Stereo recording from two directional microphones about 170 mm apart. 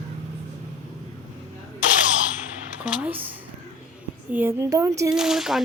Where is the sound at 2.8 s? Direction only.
5° right (ahead or behind).